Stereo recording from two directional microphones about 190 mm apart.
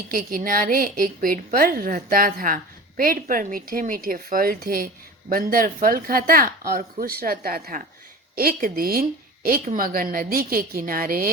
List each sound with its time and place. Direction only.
0.1 s a woman's voice: 50° right (ahead or behind)